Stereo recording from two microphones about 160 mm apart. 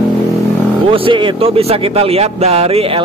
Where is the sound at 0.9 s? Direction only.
30° right (ahead or behind).